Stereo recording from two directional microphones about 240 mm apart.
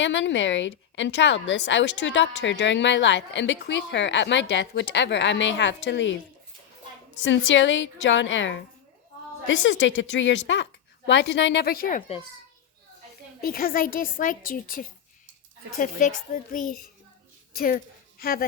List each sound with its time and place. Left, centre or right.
0.0 s a woman's voice: left
7.2 s a woman's voice: left
13.4 s a woman's voice: left